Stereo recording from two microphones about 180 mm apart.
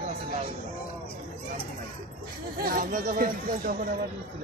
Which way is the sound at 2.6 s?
50° right (ahead or behind).